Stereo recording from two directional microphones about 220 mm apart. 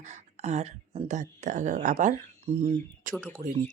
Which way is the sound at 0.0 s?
30° right (ahead or behind).